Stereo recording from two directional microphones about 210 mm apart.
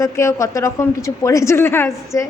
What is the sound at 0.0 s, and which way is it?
Speech, 15° left (ahead or behind).